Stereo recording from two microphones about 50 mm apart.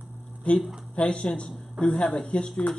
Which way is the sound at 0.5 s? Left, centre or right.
Left.